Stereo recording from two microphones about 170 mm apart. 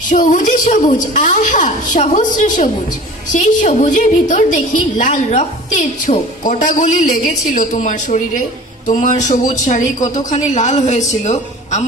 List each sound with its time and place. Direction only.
0.1 s a woman's voice: 50° left (ahead or behind)